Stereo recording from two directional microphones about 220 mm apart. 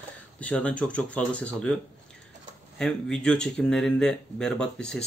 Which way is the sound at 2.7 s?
5° left (ahead or behind).